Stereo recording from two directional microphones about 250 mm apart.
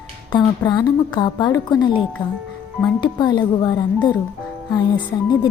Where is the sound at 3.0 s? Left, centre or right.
Centre.